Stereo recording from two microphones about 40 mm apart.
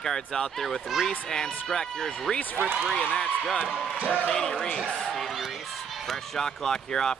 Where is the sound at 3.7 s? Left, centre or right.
Right.